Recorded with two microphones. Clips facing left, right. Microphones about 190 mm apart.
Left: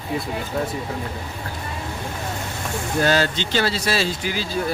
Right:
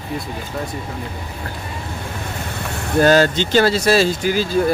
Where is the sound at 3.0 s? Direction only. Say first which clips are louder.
Right 7 dB; 45° right (ahead or behind).